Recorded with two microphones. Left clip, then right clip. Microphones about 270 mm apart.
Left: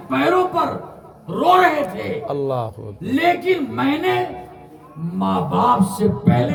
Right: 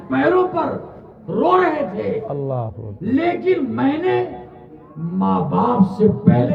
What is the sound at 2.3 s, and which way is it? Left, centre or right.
Speech, left.